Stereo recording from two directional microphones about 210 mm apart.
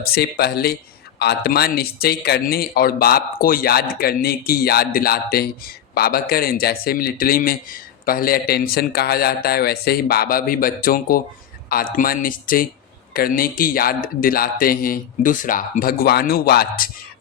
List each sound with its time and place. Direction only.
0.0 s speech: 50° left (ahead or behind)